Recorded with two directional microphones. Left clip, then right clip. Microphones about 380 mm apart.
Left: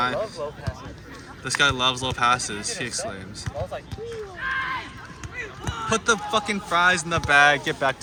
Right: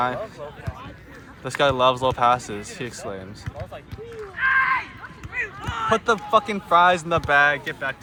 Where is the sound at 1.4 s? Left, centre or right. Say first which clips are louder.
Right 2 dB; centre.